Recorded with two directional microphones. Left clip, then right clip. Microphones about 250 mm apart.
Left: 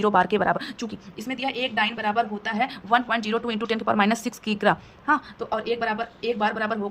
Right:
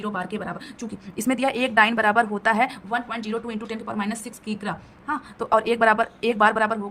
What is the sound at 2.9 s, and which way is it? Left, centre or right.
Speech, centre.